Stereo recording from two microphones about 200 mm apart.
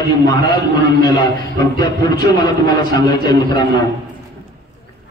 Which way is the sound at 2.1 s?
20° left (ahead or behind).